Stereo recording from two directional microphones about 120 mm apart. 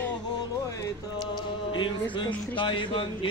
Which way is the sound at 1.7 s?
40° left (ahead or behind).